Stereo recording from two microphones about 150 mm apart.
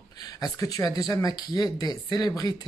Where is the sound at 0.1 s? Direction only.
25° left (ahead or behind).